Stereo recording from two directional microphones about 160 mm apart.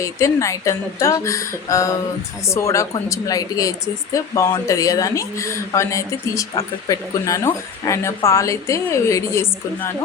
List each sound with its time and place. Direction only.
0.0 s speech: 20° left (ahead or behind)